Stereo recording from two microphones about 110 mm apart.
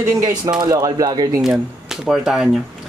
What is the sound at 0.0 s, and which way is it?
Speech, 30° right (ahead or behind).